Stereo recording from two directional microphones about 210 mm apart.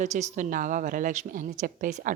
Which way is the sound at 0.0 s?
35° right (ahead or behind).